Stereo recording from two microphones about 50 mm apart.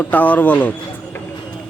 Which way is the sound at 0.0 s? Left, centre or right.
Left.